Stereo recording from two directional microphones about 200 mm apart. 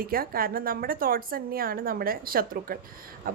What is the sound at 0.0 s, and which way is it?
A woman's voice, 45° right (ahead or behind).